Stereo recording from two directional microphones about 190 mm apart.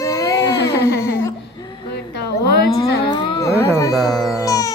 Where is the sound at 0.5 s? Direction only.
65° left (ahead or behind).